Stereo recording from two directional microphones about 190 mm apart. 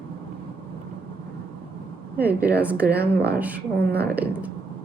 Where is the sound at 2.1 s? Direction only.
10° right (ahead or behind).